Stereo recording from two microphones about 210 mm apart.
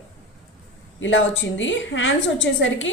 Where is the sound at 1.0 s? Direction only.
60° left (ahead or behind).